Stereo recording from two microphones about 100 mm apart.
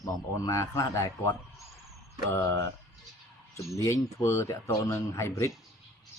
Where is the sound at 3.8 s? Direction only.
30° left (ahead or behind).